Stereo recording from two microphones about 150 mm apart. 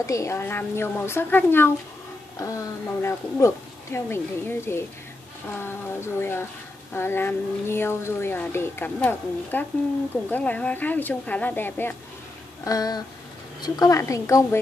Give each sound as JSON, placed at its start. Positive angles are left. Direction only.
{"t": 0.0, "sound": "speech", "side_deg": 20}
{"t": 12.6, "sound": "a woman's voice", "side_deg": 25}